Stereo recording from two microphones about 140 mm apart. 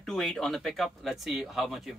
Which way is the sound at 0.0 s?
Centre (ahead or behind).